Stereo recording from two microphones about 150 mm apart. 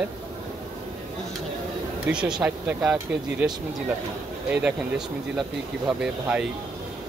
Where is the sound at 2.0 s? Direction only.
5° right (ahead or behind).